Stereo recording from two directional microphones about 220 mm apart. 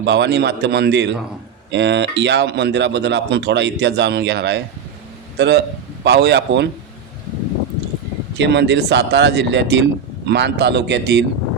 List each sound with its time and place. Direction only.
0.0 s a man's voice: 50° right (ahead or behind)
8.4 s speech: 50° right (ahead or behind)